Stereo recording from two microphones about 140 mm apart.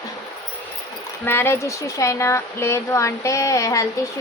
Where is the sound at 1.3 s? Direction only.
15° left (ahead or behind).